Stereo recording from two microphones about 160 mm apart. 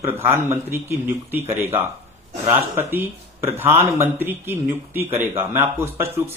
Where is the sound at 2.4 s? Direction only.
15° right (ahead or behind).